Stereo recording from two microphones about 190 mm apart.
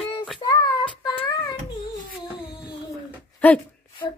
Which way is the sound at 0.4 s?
20° left (ahead or behind).